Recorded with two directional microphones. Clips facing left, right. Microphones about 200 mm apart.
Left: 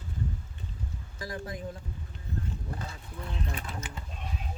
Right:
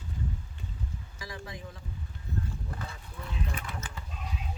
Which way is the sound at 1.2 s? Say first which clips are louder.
Left 5 dB; 50° left (ahead or behind).